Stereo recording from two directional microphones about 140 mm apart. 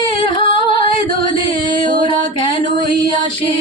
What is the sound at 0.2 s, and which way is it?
Singing, 35° left (ahead or behind).